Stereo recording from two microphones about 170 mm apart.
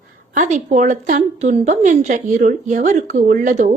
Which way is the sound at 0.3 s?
45° right (ahead or behind).